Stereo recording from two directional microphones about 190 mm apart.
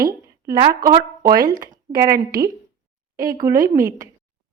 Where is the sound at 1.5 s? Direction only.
45° right (ahead or behind).